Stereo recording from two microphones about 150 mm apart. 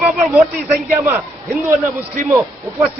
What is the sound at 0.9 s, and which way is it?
Speech, 15° right (ahead or behind).